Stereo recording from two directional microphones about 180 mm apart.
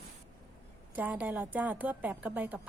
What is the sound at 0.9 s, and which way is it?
A woman's voice, 10° right (ahead or behind).